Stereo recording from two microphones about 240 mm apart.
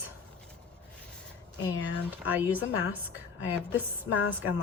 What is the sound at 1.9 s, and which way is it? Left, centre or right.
Speech, centre.